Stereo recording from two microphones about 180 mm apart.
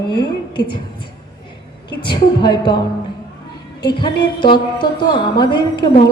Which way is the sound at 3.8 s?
25° left (ahead or behind).